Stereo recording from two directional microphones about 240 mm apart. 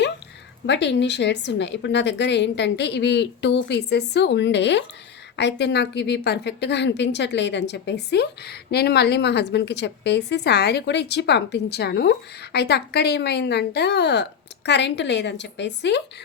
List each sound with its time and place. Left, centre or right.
0.7 s a woman's voice: left